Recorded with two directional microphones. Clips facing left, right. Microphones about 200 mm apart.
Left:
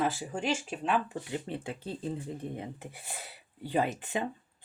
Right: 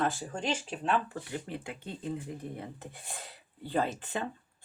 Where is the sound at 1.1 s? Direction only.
25° left (ahead or behind).